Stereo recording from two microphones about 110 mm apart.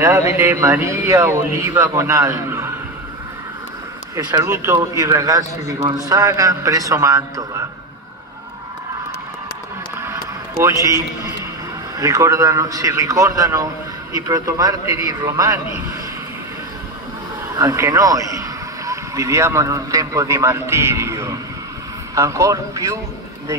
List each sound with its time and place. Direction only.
0.0 s speech: 25° right (ahead or behind)
4.5 s a man's voice: 25° right (ahead or behind)
10.6 s a man's voice: 25° right (ahead or behind)
17.6 s speech: 30° right (ahead or behind)